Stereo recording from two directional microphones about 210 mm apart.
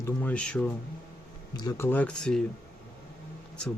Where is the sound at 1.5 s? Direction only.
15° left (ahead or behind).